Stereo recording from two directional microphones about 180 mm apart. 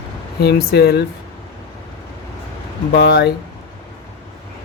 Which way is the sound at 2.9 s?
65° left (ahead or behind).